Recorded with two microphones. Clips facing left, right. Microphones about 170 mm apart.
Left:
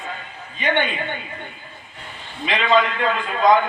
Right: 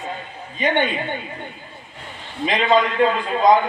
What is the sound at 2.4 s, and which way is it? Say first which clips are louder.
A man's voice: right 1 dB; 40° right (ahead or behind).